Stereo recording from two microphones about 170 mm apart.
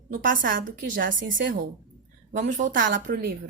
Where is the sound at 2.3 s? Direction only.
50° right (ahead or behind).